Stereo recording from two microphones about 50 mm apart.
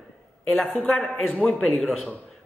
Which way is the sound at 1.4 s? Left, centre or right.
Left.